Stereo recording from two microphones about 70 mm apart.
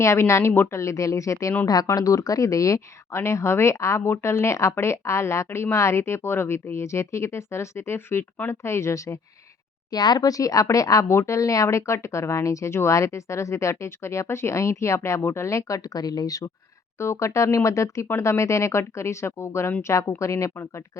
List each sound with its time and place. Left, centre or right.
0.0 s a woman's voice: left
0.8 s speech: left
1.6 s speech: left
1.9 s a woman's voice: left
8.2 s speech: left
8.6 s a woman's voice: left
9.9 s speech: left
17.0 s speech: left